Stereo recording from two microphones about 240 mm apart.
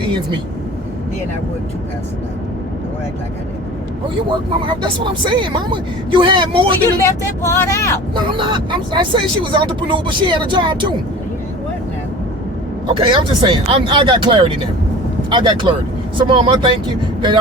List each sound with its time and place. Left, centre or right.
0.0 s speech: centre
4.3 s speech: centre
7.4 s speech: centre
8.1 s speech: centre
12.9 s speech: right